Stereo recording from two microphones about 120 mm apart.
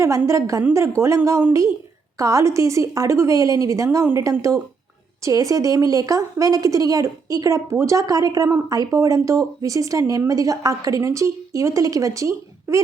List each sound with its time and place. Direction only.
0.3 s speech: 25° right (ahead or behind)